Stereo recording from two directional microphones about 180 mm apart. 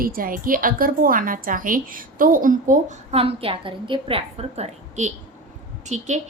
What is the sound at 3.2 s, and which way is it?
A woman's voice, 30° right (ahead or behind).